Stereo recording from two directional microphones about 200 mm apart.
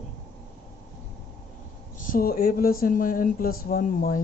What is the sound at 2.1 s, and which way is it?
Speech, 50° left (ahead or behind).